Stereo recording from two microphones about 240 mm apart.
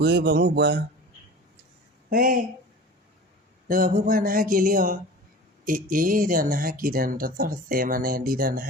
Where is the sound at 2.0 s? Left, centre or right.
Right.